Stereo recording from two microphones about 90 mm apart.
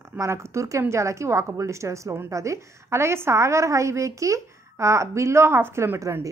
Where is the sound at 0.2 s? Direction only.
30° right (ahead or behind).